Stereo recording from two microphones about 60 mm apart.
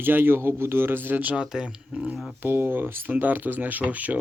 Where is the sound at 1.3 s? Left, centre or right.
Centre.